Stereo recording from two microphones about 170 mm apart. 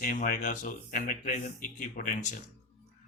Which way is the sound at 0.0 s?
50° left (ahead or behind).